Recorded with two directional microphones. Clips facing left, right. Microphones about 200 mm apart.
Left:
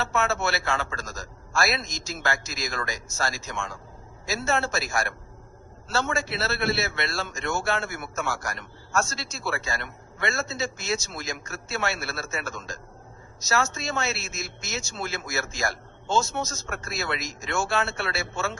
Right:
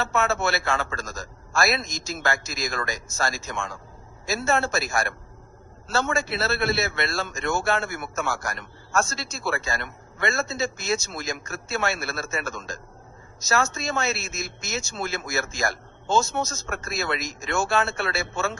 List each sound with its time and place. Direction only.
0.0 s a man's voice: 50° right (ahead or behind)